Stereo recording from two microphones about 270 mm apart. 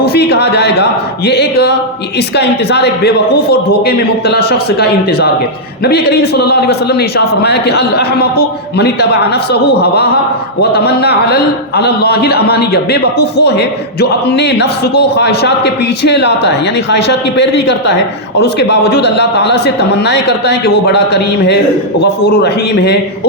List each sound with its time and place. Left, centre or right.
0.0 s a man's voice: left